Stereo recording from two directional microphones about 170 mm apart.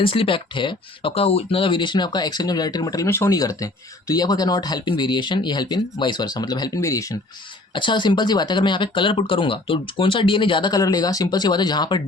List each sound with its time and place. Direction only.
0.0 s speech: 30° left (ahead or behind)